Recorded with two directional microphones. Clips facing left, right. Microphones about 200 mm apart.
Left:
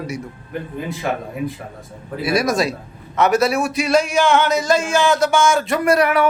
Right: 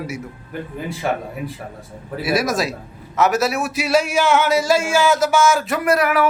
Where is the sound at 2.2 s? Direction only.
5° right (ahead or behind).